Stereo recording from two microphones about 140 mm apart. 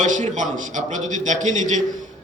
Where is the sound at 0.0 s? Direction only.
60° right (ahead or behind).